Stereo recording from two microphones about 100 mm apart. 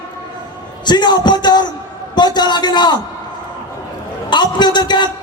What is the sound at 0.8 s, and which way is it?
A man's voice, 45° left (ahead or behind).